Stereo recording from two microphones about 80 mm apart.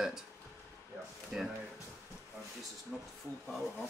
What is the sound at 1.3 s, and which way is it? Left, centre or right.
Speech, centre.